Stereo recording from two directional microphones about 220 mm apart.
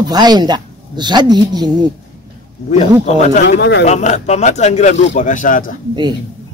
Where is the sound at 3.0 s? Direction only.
30° left (ahead or behind).